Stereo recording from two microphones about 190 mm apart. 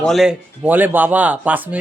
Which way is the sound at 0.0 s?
Centre (ahead or behind).